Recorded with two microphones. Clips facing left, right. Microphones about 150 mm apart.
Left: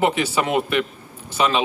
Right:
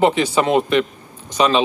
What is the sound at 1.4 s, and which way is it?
Speech, 25° right (ahead or behind).